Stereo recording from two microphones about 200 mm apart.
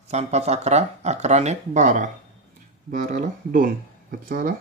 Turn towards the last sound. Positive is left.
turn(degrees=-45)  # may be behind; listen again after turning